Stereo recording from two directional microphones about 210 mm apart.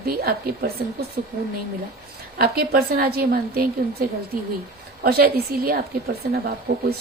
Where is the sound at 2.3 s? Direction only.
45° right (ahead or behind).